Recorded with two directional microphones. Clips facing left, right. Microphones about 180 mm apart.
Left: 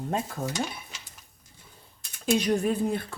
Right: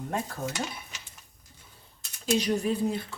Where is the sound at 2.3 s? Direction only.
55° left (ahead or behind).